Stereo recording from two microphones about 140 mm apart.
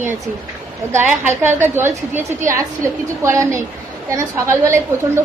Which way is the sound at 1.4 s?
15° right (ahead or behind).